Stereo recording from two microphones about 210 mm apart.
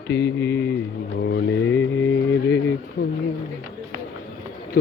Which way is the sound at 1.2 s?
55° left (ahead or behind).